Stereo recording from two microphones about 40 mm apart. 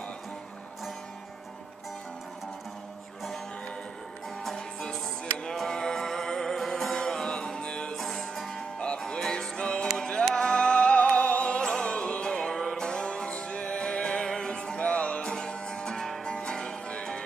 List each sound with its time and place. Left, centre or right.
5.4 s music: centre
7.9 s music: centre
8.7 s music: left